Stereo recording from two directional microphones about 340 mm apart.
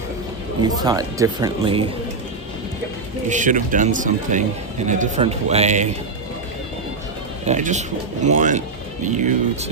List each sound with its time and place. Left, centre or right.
0.8 s speech: centre
3.2 s speech: right
7.4 s speech: right